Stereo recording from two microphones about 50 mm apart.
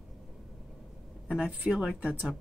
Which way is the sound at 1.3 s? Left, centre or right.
Centre.